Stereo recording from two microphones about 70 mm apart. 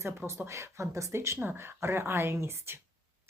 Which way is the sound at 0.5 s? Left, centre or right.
Right.